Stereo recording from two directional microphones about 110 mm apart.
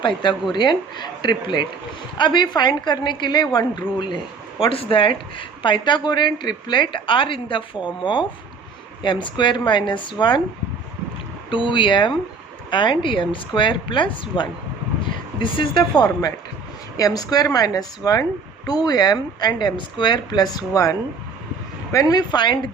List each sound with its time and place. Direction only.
0.5 s a woman's voice: 45° left (ahead or behind)
4.6 s speech: 55° left (ahead or behind)
11.5 s speech: 50° left (ahead or behind)
17.0 s a woman's voice: 35° left (ahead or behind)
21.9 s a woman's voice: 35° left (ahead or behind)